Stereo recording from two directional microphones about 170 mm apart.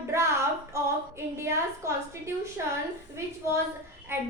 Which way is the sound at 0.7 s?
15° right (ahead or behind).